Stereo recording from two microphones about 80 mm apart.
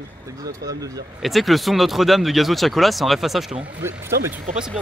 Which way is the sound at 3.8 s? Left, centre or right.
Right.